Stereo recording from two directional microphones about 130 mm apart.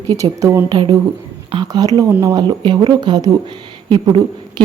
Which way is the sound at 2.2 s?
35° right (ahead or behind).